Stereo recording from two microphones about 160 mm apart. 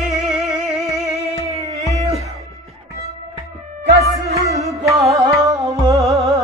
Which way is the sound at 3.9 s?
80° right.